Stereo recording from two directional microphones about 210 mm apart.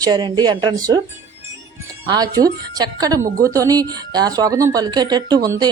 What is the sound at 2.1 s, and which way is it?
Speech, 20° right (ahead or behind).